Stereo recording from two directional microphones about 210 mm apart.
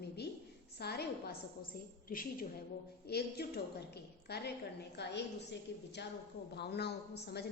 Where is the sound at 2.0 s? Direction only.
45° left (ahead or behind).